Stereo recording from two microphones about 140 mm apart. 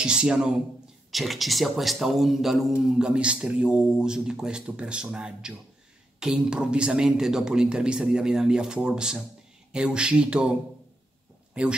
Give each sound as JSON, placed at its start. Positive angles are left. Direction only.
{"t": 0.0, "sound": "speech", "side_deg": -5}
{"t": 11.6, "sound": "speech", "side_deg": -5}